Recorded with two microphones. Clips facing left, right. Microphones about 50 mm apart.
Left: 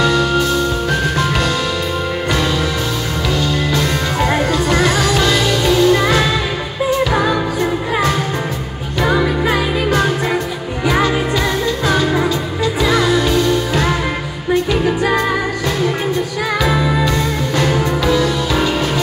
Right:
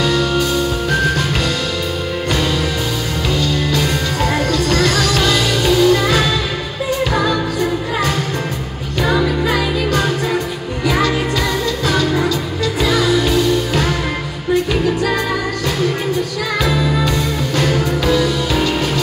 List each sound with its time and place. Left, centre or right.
0.0 s music: centre
4.2 s music: centre
5.2 s music: centre
9.0 s music: left
11.9 s music: centre
16.6 s music: left; by 18.7 s centre